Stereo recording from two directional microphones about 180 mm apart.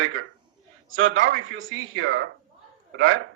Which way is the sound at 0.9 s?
90° right.